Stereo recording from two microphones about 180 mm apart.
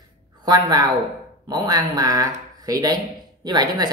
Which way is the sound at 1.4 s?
20° right (ahead or behind).